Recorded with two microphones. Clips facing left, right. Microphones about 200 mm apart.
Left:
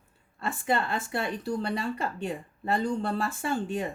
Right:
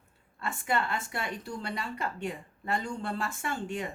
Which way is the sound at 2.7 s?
35° left (ahead or behind).